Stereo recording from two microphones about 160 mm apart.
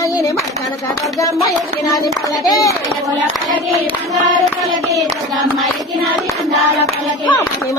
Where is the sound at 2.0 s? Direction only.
Centre (ahead or behind).